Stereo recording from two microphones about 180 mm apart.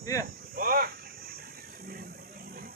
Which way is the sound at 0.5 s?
55° right (ahead or behind).